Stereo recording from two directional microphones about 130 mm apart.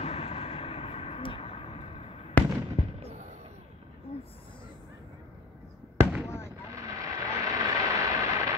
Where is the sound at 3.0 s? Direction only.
55° right (ahead or behind).